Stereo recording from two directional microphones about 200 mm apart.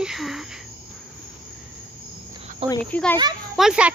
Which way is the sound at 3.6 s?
5° right (ahead or behind).